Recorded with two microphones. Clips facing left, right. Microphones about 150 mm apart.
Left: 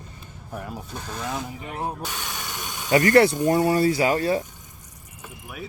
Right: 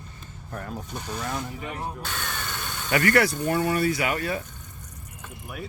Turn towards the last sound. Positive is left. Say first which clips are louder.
# left 6 dB
turn(degrees=30)  # may be behind; listen again after turning